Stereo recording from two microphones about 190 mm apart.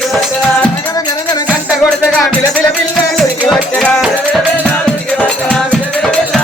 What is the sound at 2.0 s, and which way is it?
Music, 10° right (ahead or behind).